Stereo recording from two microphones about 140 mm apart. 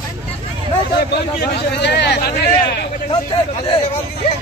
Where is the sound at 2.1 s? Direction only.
85° left.